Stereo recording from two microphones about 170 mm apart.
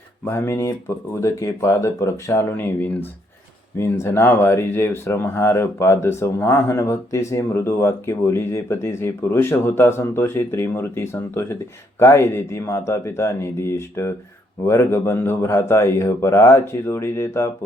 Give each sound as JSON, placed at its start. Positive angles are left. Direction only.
{"t": 0.3, "sound": "speech", "side_deg": 15}